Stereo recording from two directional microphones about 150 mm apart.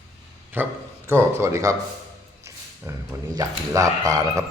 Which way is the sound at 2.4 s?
20° right (ahead or behind).